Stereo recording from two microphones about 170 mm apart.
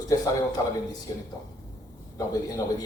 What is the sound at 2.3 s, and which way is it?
Speech, 20° left (ahead or behind).